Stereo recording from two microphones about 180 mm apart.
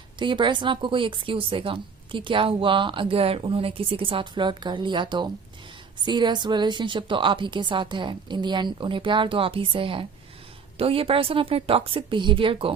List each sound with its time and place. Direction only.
0.2 s a woman's voice: 25° right (ahead or behind)